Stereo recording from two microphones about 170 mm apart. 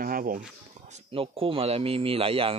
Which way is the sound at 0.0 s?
55° right (ahead or behind).